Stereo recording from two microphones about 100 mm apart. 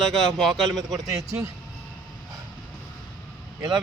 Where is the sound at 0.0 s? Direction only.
5° left (ahead or behind).